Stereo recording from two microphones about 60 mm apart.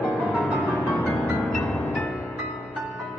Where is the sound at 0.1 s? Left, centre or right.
Centre.